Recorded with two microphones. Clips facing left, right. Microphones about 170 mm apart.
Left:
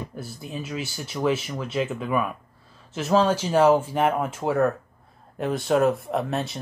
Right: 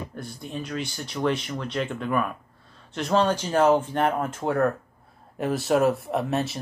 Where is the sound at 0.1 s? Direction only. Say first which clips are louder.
Even; 5° left (ahead or behind).